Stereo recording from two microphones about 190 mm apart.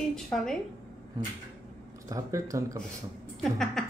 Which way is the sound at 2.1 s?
15° right (ahead or behind).